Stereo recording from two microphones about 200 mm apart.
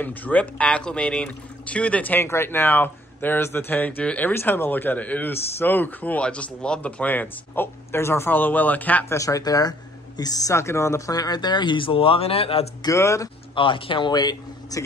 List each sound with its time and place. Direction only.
0.0 s speech: 10° left (ahead or behind); by 12.6 s 30° left (ahead or behind)
12.8 s speech: 15° left (ahead or behind)